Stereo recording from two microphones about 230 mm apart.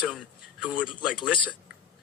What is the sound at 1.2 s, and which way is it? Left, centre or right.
Speech, centre.